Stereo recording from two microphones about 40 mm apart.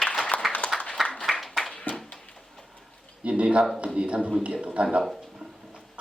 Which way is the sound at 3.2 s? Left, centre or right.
Right.